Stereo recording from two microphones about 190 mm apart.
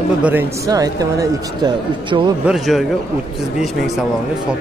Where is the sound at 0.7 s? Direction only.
20° right (ahead or behind).